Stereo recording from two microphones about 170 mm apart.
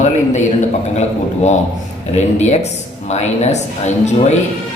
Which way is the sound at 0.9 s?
40° left (ahead or behind).